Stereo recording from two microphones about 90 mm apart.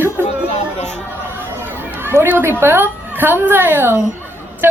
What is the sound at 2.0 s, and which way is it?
A woman's voice, 25° right (ahead or behind).